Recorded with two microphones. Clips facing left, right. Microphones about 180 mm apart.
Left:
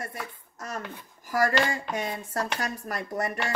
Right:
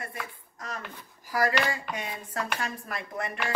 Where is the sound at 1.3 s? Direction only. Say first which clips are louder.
Left 2 dB; 45° left (ahead or behind).